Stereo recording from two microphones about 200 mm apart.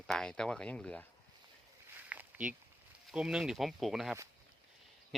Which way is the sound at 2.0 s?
10° right (ahead or behind).